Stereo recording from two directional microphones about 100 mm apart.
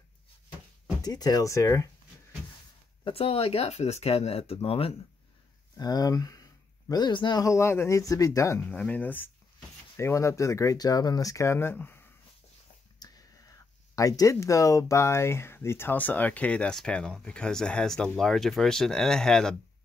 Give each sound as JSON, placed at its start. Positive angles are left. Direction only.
{"t": 1.0, "sound": "speech", "side_deg": 40}
{"t": 3.1, "sound": "speech", "side_deg": 75}
{"t": 4.6, "sound": "speech", "side_deg": 75}
{"t": 5.8, "sound": "speech", "side_deg": 40}
{"t": 7.4, "sound": "speech", "side_deg": 30}
{"t": 8.6, "sound": "speech", "side_deg": 10}
{"t": 9.9, "sound": "speech", "side_deg": 30}
{"t": 13.0, "sound": "whispering", "side_deg": 40}
{"t": 13.9, "sound": "speech", "side_deg": 35}